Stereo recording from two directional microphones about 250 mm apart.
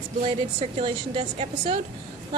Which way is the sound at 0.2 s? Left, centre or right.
Right.